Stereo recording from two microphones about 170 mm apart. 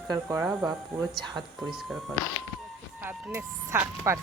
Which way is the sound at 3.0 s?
10° right (ahead or behind).